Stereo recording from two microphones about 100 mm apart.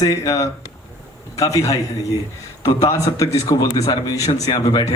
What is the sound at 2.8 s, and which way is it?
Speech, 35° left (ahead or behind).